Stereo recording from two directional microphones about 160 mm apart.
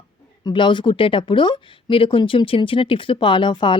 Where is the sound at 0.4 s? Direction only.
30° left (ahead or behind).